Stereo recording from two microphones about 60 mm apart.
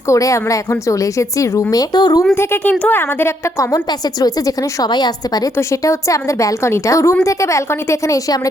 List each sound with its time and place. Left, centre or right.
0.1 s a woman's voice: left
1.7 s a woman's voice: left
2.3 s a woman's voice: left
2.6 s speech: left
3.0 s a woman's voice: left
3.7 s a woman's voice: left
5.5 s a woman's voice: left